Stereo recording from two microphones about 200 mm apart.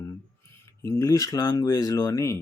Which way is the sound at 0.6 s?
15° left (ahead or behind).